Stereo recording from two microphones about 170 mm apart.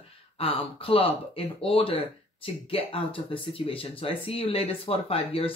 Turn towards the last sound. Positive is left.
turn(degrees=35)  # may be behind; listen again after turning